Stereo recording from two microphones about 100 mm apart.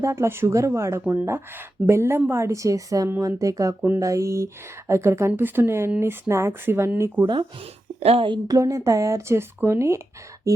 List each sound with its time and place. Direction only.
0.0 s a woman's voice: 30° right (ahead or behind)
3.8 s speech: 15° right (ahead or behind)
4.0 s speech: 30° right (ahead or behind)
7.9 s a woman's voice: 85° right
8.4 s speech: 35° right (ahead or behind)